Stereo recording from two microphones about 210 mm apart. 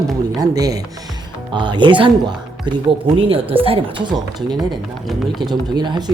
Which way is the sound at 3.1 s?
25° right (ahead or behind).